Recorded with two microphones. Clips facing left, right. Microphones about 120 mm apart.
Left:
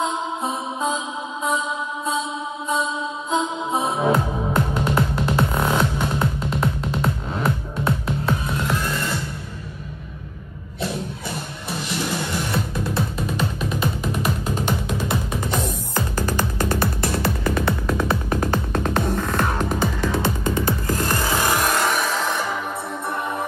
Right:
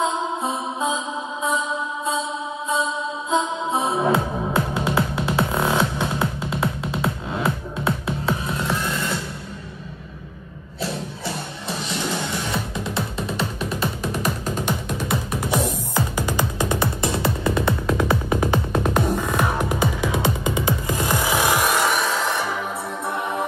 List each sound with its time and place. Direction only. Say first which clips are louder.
0.0 s music: right 1 dB; centre (ahead or behind)
3.3 s music: right 1 dB; centre (ahead or behind)
12.8 s music: left 2 dB; centre (ahead or behind); by 18.0 s 20° right (ahead or behind)
18.3 s music: right 1 dB; 10° right (ahead or behind)